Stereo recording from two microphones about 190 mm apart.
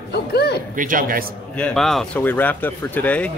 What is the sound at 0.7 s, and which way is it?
Speech, 45° right (ahead or behind).